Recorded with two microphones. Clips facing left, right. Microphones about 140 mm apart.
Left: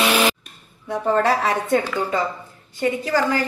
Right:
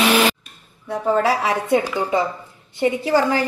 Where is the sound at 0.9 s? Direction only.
5° right (ahead or behind).